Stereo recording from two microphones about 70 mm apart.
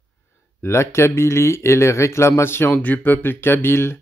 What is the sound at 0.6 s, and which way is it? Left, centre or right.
Speech, left.